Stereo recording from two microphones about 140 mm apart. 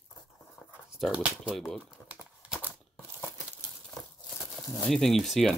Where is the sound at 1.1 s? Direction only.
5° right (ahead or behind).